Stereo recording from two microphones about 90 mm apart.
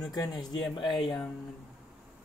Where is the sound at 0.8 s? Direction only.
60° left (ahead or behind).